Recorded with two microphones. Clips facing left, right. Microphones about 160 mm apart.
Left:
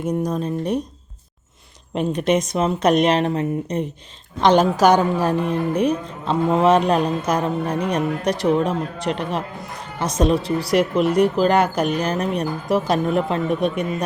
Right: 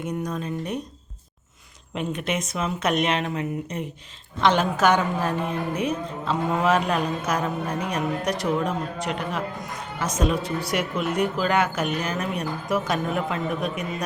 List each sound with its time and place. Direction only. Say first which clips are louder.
0.3 s a woman's voice: left 6 dB; 35° left (ahead or behind)
2.0 s a woman's voice: left 8 dB; 35° left (ahead or behind)